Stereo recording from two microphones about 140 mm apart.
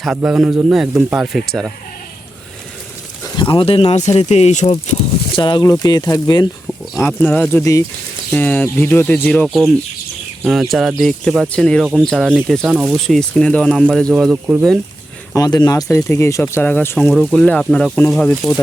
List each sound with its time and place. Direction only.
0.0 s a man's voice: 5° right (ahead or behind)
3.2 s speech: 35° left (ahead or behind)
7.0 s speech: 10° left (ahead or behind)
9.5 s a man's voice: centre (ahead or behind)
15.4 s speech: 30° left (ahead or behind)
17.1 s a man's voice: 5° left (ahead or behind)